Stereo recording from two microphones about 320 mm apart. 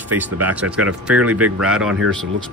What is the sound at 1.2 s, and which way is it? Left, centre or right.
Speech, right.